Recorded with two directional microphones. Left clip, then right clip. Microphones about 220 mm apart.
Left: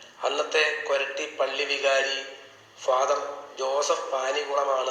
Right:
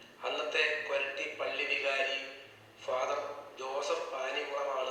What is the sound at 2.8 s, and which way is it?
Speech, 45° left (ahead or behind).